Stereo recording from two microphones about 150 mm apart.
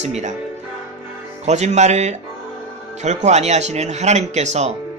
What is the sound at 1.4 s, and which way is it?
A man's voice, 50° right (ahead or behind).